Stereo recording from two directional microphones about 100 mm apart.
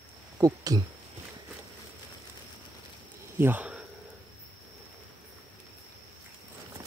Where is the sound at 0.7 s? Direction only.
35° right (ahead or behind).